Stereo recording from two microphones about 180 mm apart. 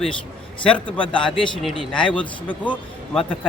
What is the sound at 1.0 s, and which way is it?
Speech, 30° left (ahead or behind).